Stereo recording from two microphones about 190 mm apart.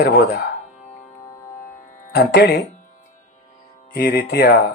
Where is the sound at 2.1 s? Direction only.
60° left (ahead or behind).